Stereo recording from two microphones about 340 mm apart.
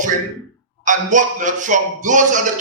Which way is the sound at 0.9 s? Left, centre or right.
Right.